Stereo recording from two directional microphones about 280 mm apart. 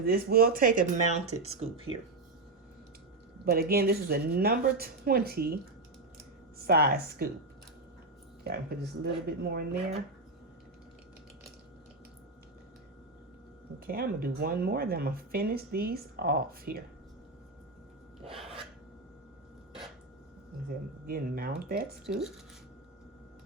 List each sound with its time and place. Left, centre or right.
0.0 s speech: right
3.4 s speech: right
6.6 s speech: right
8.4 s speech: right
13.7 s speech: right
21.1 s speech: right